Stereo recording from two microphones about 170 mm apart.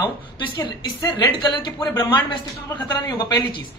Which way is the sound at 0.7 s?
25° left (ahead or behind).